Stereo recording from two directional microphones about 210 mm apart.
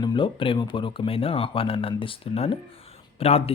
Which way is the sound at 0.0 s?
20° left (ahead or behind).